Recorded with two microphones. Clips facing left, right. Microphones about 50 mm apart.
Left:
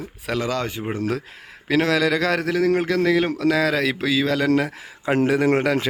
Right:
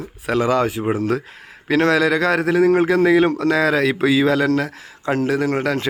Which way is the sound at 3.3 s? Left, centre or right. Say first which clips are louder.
Right 3 dB; centre.